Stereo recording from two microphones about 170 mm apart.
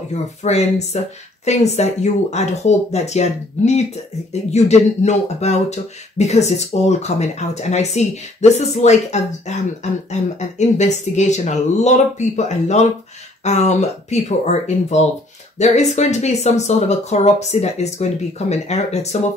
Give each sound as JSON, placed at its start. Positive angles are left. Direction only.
{"t": 0.1, "sound": "speech", "side_deg": 40}
{"t": 10.8, "sound": "speech", "side_deg": 40}